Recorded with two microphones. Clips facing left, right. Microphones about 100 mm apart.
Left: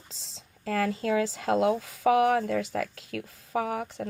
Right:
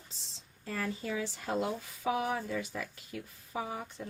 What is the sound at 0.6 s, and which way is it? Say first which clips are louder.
Speech: left 9 dB; 90° left.